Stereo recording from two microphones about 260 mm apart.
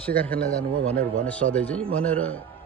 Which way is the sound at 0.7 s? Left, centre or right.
Right.